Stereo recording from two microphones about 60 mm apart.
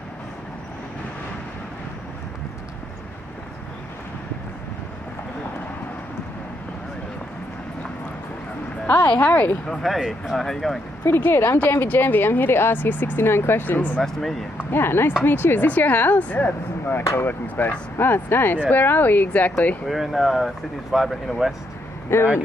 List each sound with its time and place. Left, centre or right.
8.8 s a woman's voice: left
9.7 s speech: centre
9.9 s speech: centre
10.3 s speech: centre
11.1 s speech: left
14.0 s speech: centre
14.6 s speech: left
19.9 s speech: centre
22.1 s speech: left